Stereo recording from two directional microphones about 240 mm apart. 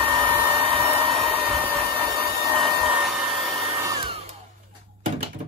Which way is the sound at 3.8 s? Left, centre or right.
Right.